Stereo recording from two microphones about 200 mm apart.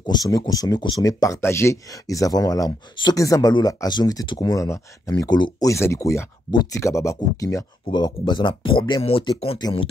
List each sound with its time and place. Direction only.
0.0 s speech: 20° left (ahead or behind)